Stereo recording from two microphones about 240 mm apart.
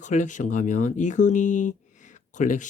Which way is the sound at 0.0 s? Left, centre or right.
Left.